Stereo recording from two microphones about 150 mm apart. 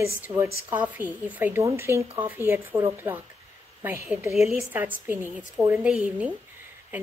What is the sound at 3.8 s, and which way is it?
Speech, 15° right (ahead or behind).